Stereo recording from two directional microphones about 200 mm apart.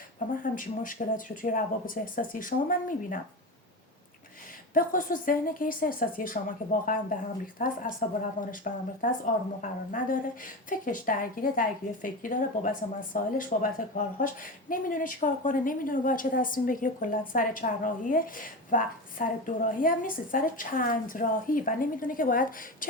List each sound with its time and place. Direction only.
0.4 s speech: 40° left (ahead or behind)
4.7 s speech: 45° left (ahead or behind)